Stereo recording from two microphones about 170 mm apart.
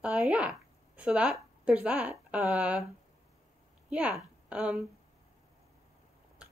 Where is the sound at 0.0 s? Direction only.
5° right (ahead or behind).